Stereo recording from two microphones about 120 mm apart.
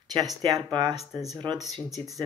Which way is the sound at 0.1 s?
35° right (ahead or behind).